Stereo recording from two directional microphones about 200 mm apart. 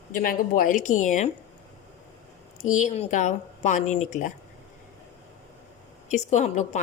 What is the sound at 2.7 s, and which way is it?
Speech, 35° left (ahead or behind).